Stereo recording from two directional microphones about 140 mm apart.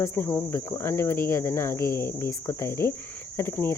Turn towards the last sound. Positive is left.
turn(degrees=15)  # may be behind; listen again after turning